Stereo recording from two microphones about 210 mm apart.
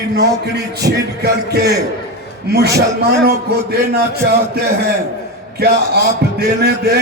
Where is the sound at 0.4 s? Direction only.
50° right (ahead or behind).